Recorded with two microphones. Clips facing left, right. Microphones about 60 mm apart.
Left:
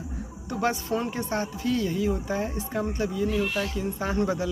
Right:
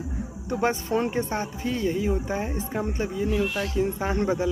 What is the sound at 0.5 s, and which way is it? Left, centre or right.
Speech, right.